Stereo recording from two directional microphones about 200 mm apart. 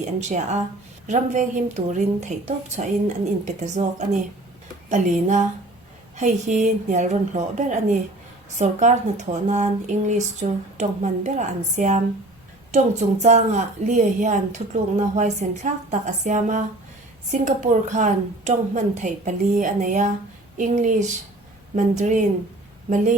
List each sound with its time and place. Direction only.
0.0 s speech: 35° right (ahead or behind)